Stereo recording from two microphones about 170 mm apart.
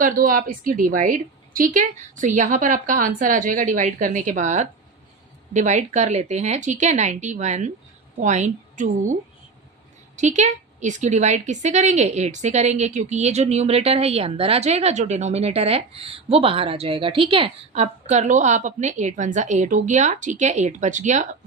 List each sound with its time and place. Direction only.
0.0 s a woman's voice: 55° right (ahead or behind)
10.2 s a woman's voice: 45° right (ahead or behind)